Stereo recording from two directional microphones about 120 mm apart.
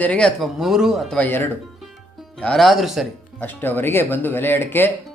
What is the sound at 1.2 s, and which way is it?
Speech, 15° left (ahead or behind).